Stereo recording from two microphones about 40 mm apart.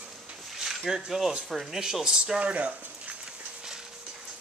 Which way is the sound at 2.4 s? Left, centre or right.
Right.